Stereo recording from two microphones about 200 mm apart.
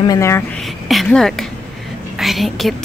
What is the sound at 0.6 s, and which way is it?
A woman's voice, centre (ahead or behind).